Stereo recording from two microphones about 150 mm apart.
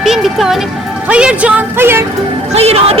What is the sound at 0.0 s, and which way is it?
Music, centre (ahead or behind).